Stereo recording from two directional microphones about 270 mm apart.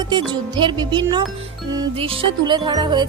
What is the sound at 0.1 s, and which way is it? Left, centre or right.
Speech, centre.